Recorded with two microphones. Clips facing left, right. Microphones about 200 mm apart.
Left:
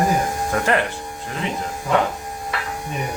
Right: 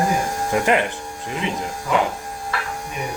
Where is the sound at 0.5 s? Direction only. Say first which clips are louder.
Right 2 dB; 15° right (ahead or behind).